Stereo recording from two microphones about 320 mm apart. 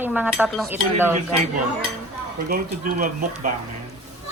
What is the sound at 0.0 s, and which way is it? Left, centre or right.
Cutlery, centre.